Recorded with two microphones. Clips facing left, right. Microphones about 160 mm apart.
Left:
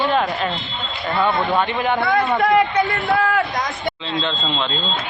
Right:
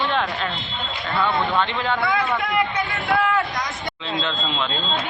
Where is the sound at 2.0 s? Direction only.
50° left (ahead or behind).